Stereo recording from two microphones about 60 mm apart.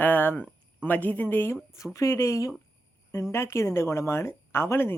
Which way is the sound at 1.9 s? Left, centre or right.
Left.